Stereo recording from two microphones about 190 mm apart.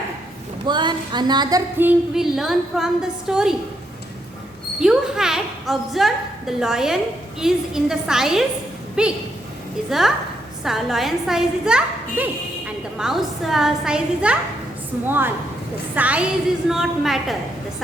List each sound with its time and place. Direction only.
0.6 s music: 25° right (ahead or behind)
1.9 s a woman's voice: centre (ahead or behind)
4.8 s a woman's voice: 5° right (ahead or behind)